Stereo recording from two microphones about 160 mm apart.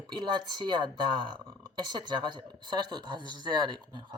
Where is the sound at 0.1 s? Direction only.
30° right (ahead or behind).